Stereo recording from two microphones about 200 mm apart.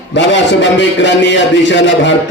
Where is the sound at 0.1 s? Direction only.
65° left (ahead or behind).